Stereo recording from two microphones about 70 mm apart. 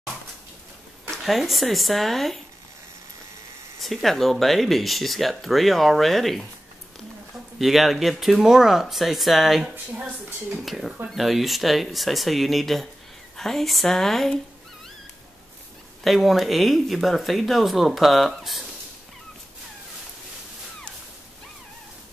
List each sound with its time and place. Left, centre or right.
1.1 s speech: centre
3.8 s speech: centre
7.5 s speech: centre
9.9 s a woman's voice: centre
10.6 s speech: centre
16.0 s speech: centre